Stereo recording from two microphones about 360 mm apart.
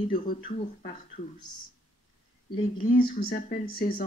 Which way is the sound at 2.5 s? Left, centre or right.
Centre.